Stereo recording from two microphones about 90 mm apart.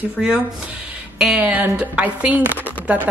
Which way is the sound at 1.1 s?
5° right (ahead or behind).